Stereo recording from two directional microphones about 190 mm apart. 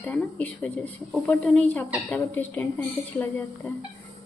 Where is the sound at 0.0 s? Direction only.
10° left (ahead or behind).